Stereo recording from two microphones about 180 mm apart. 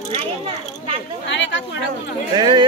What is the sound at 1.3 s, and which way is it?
Speech, 90° left.